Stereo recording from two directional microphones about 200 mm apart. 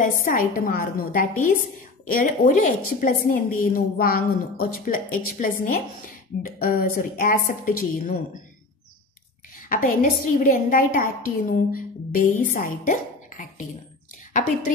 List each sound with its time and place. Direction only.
0.0 s a woman's voice: 40° left (ahead or behind)
9.6 s a woman's voice: 40° left (ahead or behind)